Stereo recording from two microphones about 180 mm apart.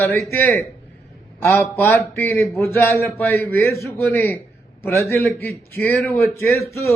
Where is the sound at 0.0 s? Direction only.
15° left (ahead or behind).